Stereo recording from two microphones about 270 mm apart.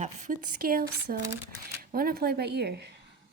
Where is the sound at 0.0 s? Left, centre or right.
Right.